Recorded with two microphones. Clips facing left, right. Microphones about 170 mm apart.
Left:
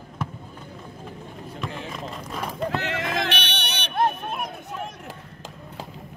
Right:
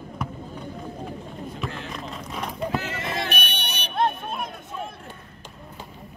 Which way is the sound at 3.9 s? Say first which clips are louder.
Left 1 dB; 5° left (ahead or behind).